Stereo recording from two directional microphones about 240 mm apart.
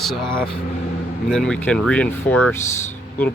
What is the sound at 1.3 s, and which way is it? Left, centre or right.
A man's voice, centre.